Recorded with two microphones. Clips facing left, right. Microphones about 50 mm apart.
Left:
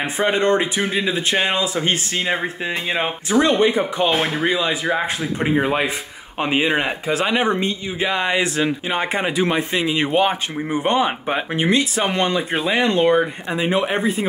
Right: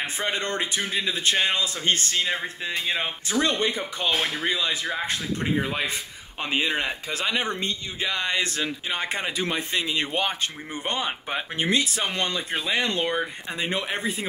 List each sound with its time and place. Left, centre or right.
0.0 s speech: centre
2.1 s speech: left
3.4 s speech: centre
4.1 s speech: left
6.4 s speech: centre